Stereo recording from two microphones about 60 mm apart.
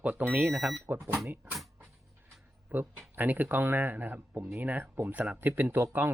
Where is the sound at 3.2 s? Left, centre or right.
Right.